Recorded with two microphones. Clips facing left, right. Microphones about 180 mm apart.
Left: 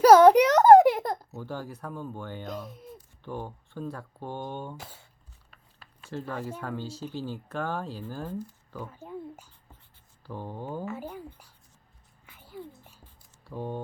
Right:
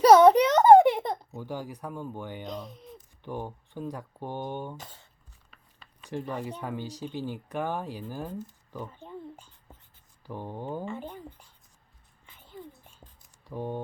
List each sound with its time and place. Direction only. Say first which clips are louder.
0.0 s a sound: left 1 dB; 5° left (ahead or behind)
1.4 s speech: right 1 dB; 15° right (ahead or behind)
2.5 s speech: left 1 dB; 5° left (ahead or behind)
3.2 s speech: right 1 dB; 15° right (ahead or behind)
4.8 s speech: left 1 dB; 10° left (ahead or behind)
5.5 s a sound: even; centre (ahead or behind)
6.1 s speech: right 1 dB; 15° right (ahead or behind)
8.9 s a sound: left 2 dB; 5° left (ahead or behind)
10.2 s speech: right 1 dB; 15° right (ahead or behind)
10.8 s speech: left 1 dB; 5° left (ahead or behind)
12.2 s a sound: left 3 dB; 10° left (ahead or behind)
13.5 s speech: right 1 dB; 15° right (ahead or behind)